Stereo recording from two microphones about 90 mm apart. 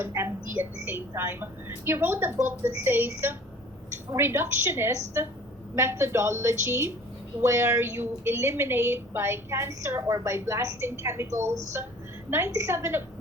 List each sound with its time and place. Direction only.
0.0 s a woman's voice: 25° right (ahead or behind)